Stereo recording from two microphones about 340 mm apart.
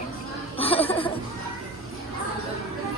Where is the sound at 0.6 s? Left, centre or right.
Centre.